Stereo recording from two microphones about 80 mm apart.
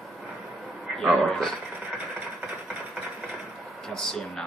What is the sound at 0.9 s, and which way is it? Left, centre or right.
Speech, centre.